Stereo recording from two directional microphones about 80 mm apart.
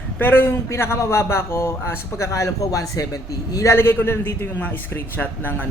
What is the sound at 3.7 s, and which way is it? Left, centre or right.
A man's voice, left.